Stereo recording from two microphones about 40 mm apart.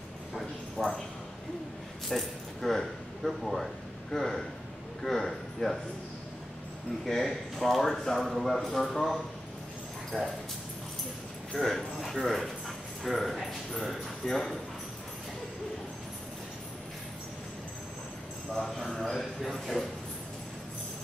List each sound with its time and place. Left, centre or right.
0.4 s a sound: centre
2.0 s speech: centre
7.2 s speech: centre
10.1 s speech: centre
11.5 s speech: centre
18.5 s speech: centre